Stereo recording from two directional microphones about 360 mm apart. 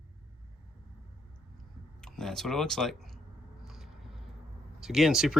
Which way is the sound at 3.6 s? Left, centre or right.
Centre.